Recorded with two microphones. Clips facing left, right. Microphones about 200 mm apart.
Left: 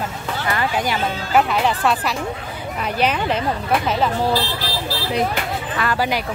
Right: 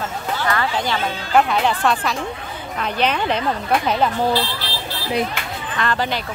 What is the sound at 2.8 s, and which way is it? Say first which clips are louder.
Speech: even; 5° left (ahead or behind).